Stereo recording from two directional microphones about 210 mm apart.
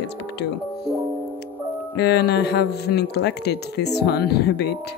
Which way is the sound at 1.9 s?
55° left (ahead or behind).